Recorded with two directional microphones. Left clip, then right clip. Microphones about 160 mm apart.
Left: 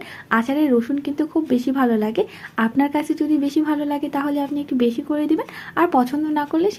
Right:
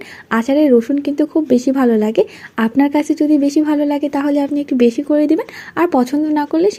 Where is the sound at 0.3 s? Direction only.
45° right (ahead or behind).